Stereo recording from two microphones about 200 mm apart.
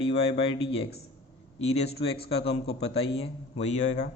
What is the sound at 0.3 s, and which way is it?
A man's voice, 30° left (ahead or behind).